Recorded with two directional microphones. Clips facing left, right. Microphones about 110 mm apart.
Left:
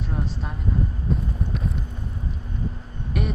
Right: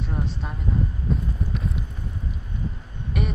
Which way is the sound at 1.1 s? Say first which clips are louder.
Left 1 dB; centre (ahead or behind).